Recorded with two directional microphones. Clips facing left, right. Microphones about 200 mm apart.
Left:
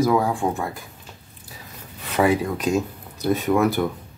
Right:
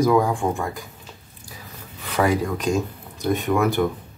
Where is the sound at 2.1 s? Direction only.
10° left (ahead or behind).